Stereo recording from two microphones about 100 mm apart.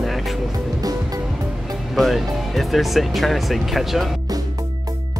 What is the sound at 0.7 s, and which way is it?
Music, 40° right (ahead or behind).